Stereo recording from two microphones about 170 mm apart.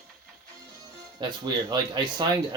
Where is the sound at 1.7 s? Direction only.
25° right (ahead or behind).